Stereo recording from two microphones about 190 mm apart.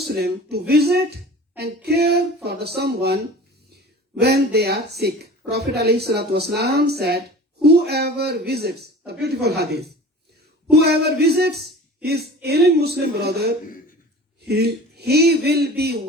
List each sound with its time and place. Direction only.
0.1 s speech: 55° right (ahead or behind)
4.2 s speech: 60° right (ahead or behind)